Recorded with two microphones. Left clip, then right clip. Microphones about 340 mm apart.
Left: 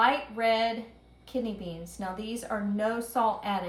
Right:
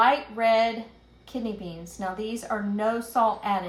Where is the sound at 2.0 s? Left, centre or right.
Centre.